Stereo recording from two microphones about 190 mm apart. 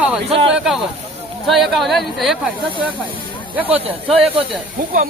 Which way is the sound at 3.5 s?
10° right (ahead or behind).